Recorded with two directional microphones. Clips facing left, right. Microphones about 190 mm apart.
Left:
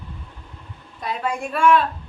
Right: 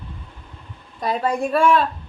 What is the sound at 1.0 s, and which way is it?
Speech, 35° right (ahead or behind).